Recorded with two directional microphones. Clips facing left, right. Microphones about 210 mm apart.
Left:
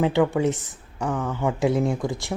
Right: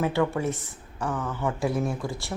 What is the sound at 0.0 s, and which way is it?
Speech, 15° left (ahead or behind).